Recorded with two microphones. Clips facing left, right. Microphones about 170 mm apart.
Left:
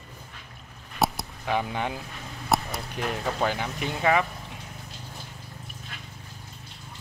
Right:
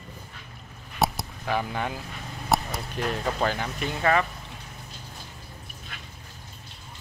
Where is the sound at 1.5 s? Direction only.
15° left (ahead or behind).